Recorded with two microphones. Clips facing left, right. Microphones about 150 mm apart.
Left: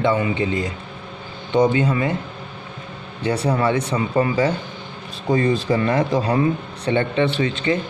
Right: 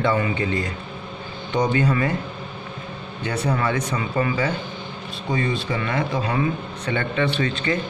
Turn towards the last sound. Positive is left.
turn(degrees=20)  # may be behind; listen again after turning